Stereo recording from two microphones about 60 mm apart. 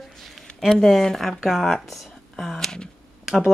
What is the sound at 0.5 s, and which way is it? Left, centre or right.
Speech, centre.